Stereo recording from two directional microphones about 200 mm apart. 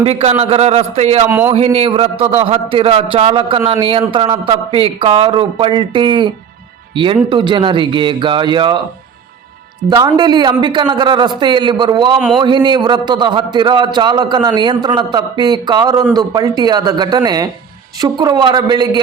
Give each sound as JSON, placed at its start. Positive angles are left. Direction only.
{"t": 0.0, "sound": "a man's voice", "side_deg": -30}
{"t": 1.3, "sound": "a man's voice", "side_deg": -10}
{"t": 1.5, "sound": "a man's voice", "side_deg": -30}
{"t": 9.9, "sound": "a man's voice", "side_deg": -20}